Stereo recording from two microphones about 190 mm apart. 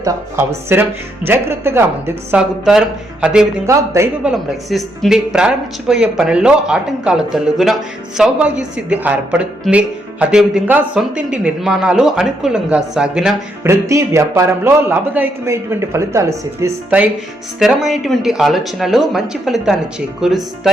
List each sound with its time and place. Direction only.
0.0 s a man's voice: 10° right (ahead or behind)
13.7 s a man's voice: 15° right (ahead or behind)